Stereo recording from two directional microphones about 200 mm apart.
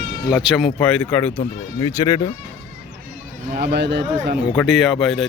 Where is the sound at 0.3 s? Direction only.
Centre (ahead or behind).